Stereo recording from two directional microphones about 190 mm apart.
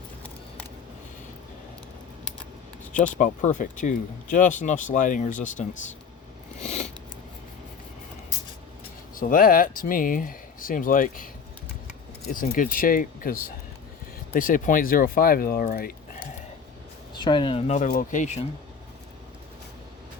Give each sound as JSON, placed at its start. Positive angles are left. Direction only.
{"t": 3.2, "sound": "speech", "side_deg": 40}
{"t": 6.6, "sound": "a sound", "side_deg": 35}
{"t": 9.1, "sound": "speech", "side_deg": 45}
{"t": 12.3, "sound": "speech", "side_deg": 45}
{"t": 17.2, "sound": "speech", "side_deg": 25}
{"t": 17.7, "sound": "speech", "side_deg": 40}